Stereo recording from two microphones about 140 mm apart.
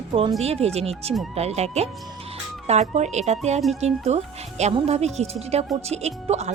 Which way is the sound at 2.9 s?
55° right (ahead or behind).